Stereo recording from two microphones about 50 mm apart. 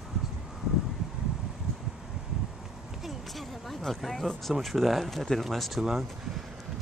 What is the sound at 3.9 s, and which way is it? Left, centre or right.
Speech, centre.